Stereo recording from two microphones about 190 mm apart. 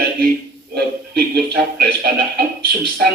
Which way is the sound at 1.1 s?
60° right (ahead or behind).